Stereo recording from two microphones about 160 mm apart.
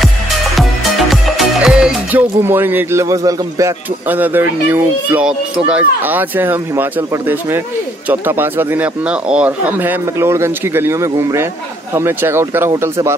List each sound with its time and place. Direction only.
1.1 s speech: centre (ahead or behind)